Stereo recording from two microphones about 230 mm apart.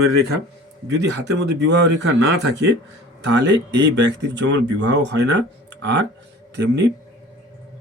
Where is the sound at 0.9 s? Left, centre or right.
Right.